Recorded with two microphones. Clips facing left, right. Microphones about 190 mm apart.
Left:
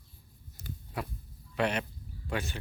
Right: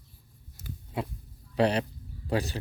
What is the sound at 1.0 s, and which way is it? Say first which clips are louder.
Speech: right 5 dB; 25° right (ahead or behind).